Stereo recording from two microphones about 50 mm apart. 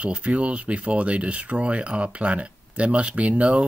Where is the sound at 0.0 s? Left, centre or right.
Right.